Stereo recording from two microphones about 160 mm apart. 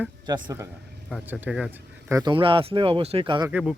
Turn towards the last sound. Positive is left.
turn(degrees=-5)  # may be behind; listen again after turning